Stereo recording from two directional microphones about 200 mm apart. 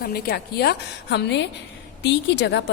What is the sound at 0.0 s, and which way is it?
A woman's voice, 50° left (ahead or behind).